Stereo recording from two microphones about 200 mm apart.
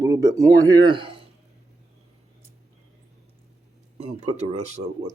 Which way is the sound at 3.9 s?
30° right (ahead or behind).